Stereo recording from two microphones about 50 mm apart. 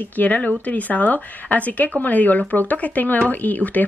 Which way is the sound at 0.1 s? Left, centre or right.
Left.